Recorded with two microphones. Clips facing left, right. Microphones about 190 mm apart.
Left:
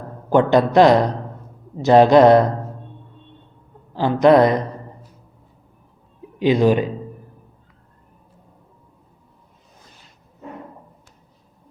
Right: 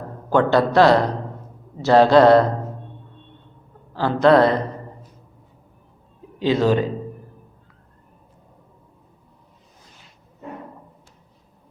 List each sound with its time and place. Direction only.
0.3 s speech: 15° left (ahead or behind)
3.9 s speech: 15° left (ahead or behind)
6.4 s speech: 15° left (ahead or behind)